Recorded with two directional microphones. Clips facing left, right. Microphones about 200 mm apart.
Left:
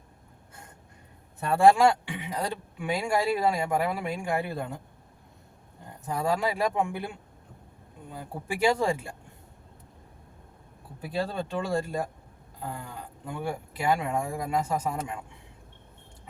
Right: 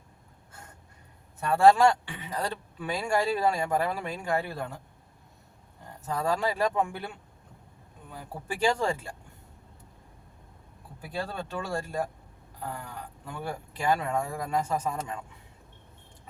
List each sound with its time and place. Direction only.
1.4 s speech: 20° left (ahead or behind)
1.7 s speech: 10° left (ahead or behind)
6.1 s speech: 10° left (ahead or behind)
11.3 s speech: 20° left (ahead or behind)